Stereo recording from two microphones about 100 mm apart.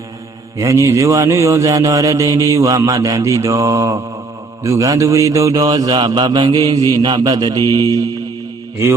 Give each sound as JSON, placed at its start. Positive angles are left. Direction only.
{"t": 0.6, "sound": "speech", "side_deg": -30}
{"t": 6.1, "sound": "mantra", "side_deg": -45}